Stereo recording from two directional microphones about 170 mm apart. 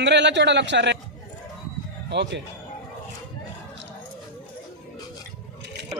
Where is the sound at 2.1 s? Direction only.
90° right.